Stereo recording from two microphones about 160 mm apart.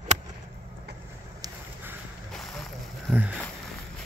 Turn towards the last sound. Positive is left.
turn(degrees=0)  # may be behind; listen again after turning